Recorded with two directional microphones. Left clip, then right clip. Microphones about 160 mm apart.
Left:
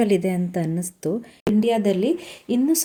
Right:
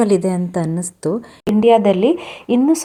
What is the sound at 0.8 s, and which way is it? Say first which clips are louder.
Speech: right 5 dB; 10° left (ahead or behind).